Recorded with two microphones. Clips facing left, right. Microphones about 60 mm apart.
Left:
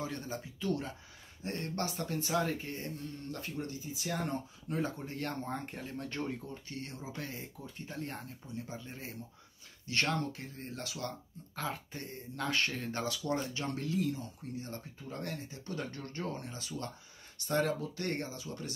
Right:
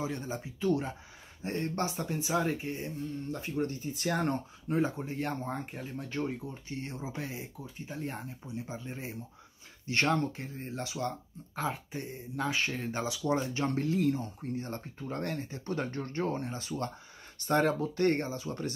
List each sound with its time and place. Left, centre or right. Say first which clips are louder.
0.0 s speech: right 4 dB; centre
3.6 s speech: right 6 dB; right
4.6 s speech: right 6 dB; right; by 6.5 s centre
6.7 s speech: right 5 dB; right
13.2 s speech: right 5 dB; right
13.9 s speech: right 5 dB; right